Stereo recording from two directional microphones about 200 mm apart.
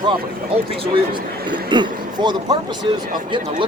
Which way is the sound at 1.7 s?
20° right (ahead or behind).